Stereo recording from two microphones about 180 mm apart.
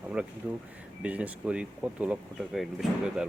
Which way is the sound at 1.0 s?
5° right (ahead or behind).